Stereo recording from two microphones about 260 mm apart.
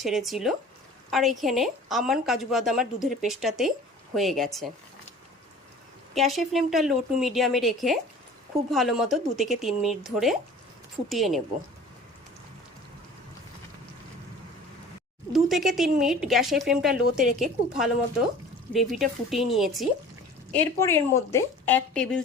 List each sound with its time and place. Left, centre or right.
0.0 s a woman's voice: centre
6.1 s a woman's voice: centre
15.3 s a woman's voice: centre